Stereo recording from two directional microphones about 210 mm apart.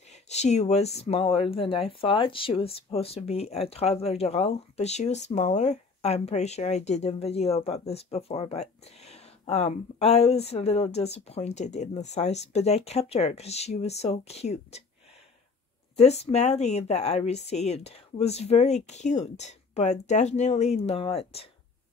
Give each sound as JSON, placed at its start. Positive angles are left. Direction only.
{"t": 0.1, "sound": "speech", "side_deg": 30}
{"t": 16.0, "sound": "speech", "side_deg": 30}